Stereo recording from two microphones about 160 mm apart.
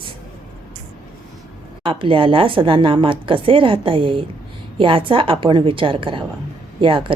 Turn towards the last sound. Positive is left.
turn(degrees=-35)  # may be behind; listen again after turning